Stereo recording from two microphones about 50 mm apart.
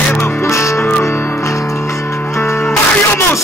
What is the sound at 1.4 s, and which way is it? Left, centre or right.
Music, left.